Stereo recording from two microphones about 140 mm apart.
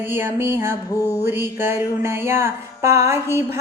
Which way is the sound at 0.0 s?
15° right (ahead or behind).